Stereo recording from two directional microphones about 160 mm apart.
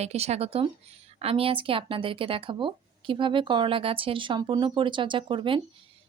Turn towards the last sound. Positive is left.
turn(degrees=-30)  # may be behind; listen again after turning